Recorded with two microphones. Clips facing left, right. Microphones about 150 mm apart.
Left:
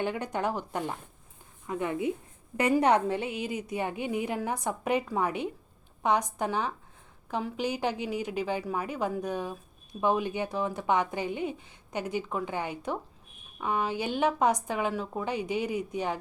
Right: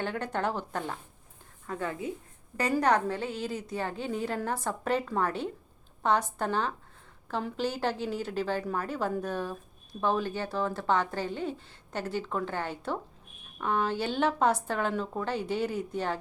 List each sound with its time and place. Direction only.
0.0 s a woman's voice: 10° left (ahead or behind)